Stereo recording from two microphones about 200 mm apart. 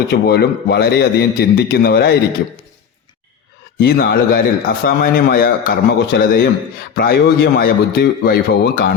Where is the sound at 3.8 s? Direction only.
50° left (ahead or behind).